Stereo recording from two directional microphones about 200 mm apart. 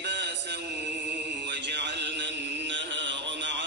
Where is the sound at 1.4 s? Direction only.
60° right (ahead or behind).